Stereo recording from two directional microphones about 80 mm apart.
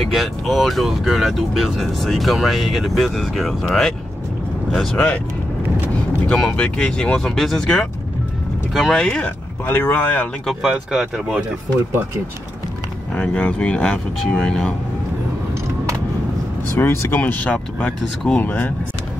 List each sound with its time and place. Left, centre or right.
0.0 s speech: centre
4.9 s speech: centre
6.2 s speech: centre
10.4 s speech: centre
13.1 s speech: centre
16.7 s speech: left